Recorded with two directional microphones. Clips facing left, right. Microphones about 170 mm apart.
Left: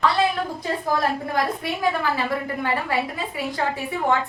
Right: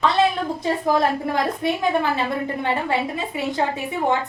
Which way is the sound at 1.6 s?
25° right (ahead or behind).